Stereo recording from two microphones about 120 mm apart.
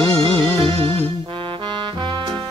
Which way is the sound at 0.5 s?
55° right (ahead or behind).